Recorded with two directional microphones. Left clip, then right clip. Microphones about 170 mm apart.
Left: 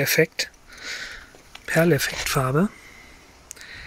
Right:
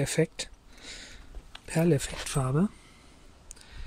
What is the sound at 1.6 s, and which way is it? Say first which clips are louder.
Speech: left 8 dB; centre (ahead or behind).